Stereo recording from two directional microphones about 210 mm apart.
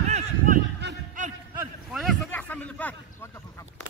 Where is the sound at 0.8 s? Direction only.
55° right (ahead or behind).